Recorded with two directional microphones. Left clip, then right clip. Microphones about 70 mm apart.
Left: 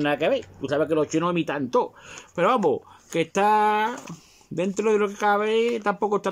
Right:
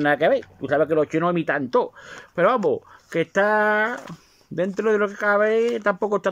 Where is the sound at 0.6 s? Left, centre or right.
Left.